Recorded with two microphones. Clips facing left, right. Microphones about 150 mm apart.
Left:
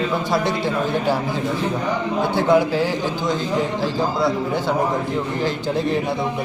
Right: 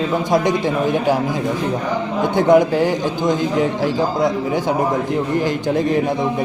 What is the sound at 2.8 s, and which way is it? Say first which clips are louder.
A man's voice: right 4 dB; 15° right (ahead or behind).